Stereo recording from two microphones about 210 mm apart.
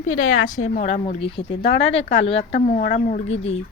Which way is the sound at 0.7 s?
35° left (ahead or behind).